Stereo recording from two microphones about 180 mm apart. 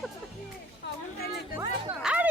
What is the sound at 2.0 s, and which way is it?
Music, 5° right (ahead or behind).